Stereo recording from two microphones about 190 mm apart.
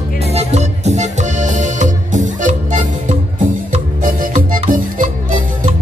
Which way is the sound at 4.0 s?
45° right (ahead or behind).